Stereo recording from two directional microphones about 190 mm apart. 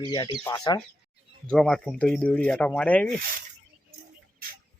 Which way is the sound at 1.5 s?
5° left (ahead or behind).